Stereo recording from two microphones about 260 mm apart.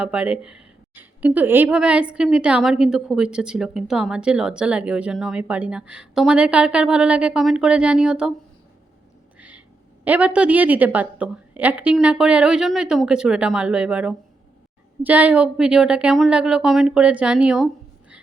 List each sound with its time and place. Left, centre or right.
0.0 s a woman's voice: centre
9.4 s a woman's voice: centre